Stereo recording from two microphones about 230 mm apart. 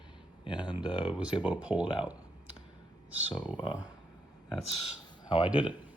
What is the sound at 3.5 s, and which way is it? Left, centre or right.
Speech, centre.